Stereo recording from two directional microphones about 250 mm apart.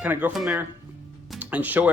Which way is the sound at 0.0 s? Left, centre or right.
Centre.